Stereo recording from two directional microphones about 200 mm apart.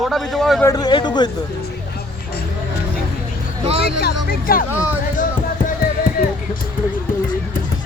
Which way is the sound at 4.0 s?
50° left (ahead or behind).